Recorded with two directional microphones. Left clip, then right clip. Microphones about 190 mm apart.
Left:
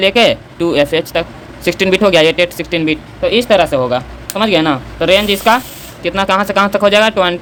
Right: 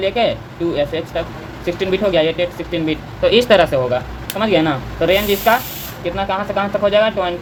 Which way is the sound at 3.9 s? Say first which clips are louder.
Left 3 dB; 25° left (ahead or behind).